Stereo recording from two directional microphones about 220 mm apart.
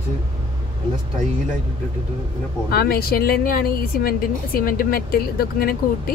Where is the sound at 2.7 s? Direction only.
45° left (ahead or behind).